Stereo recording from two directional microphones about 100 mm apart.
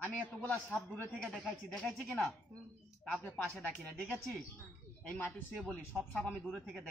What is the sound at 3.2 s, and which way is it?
Speech, 15° left (ahead or behind).